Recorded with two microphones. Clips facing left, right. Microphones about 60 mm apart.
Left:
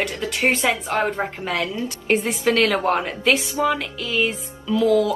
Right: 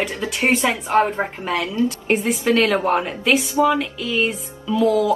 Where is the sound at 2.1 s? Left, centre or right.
Centre.